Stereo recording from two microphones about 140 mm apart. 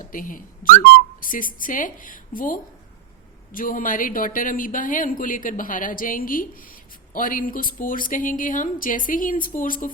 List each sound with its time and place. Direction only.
0.0 s a woman's voice: 75° left (ahead or behind)